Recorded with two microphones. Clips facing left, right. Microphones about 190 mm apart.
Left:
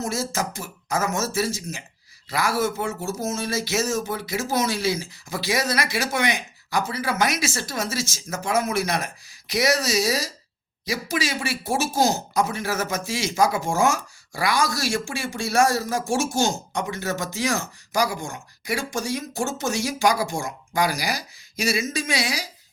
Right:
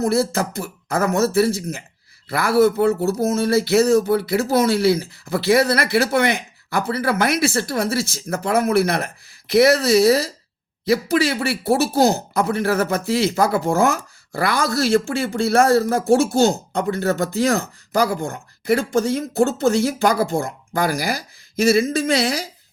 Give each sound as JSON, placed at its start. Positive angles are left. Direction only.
{"t": 0.0, "sound": "speech", "side_deg": -60}